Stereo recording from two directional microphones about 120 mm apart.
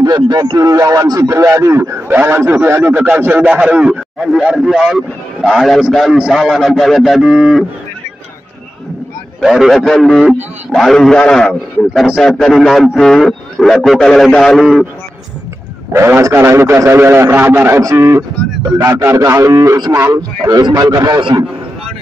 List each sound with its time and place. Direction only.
0.0 s speech: 35° right (ahead or behind); by 7.6 s 5° right (ahead or behind)
9.4 s a man's voice: centre (ahead or behind)
15.9 s a man's voice: 20° right (ahead or behind); by 21.5 s 40° right (ahead or behind)